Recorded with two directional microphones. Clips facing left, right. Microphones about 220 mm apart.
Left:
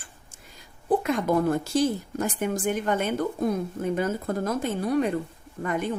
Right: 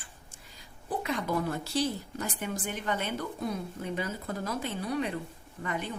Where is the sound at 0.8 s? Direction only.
50° left (ahead or behind).